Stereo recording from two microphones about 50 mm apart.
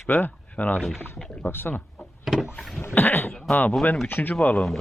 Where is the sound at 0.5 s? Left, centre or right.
Left.